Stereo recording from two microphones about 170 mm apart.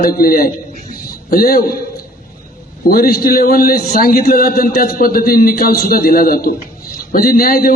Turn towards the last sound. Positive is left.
turn(degrees=60)  # may be behind; listen again after turning